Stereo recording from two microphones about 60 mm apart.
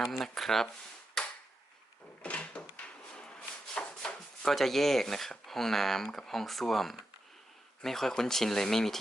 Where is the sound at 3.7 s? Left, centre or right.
Centre.